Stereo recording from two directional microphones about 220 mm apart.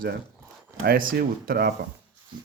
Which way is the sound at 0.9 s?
40° right (ahead or behind).